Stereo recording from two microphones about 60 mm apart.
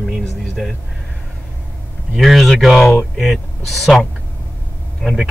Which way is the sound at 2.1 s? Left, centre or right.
Centre.